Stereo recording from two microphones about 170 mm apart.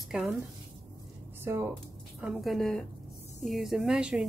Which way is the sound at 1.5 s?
15° right (ahead or behind).